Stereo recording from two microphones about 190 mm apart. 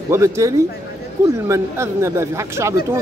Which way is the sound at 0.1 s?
15° right (ahead or behind).